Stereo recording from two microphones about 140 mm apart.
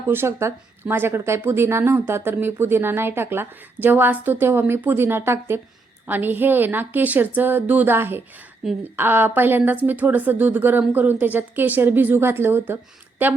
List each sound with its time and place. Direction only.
0.1 s speech: 15° right (ahead or behind)
8.6 s a woman's voice: 5° right (ahead or behind)
9.0 s speech: 15° right (ahead or behind)